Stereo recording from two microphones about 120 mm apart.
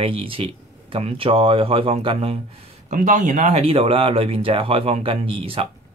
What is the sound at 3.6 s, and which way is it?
Speech, 50° right (ahead or behind).